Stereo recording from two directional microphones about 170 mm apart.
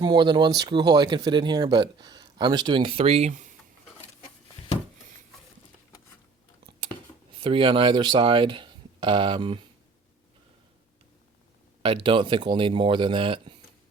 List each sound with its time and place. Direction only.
0.0 s speech: 25° right (ahead or behind); by 3.5 s 45° right (ahead or behind)
7.4 s speech: 30° right (ahead or behind)
11.8 s speech: 30° right (ahead or behind)